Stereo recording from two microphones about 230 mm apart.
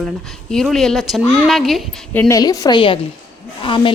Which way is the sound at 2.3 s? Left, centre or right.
Centre.